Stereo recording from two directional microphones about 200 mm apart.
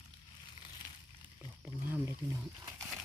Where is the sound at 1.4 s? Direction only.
10° right (ahead or behind).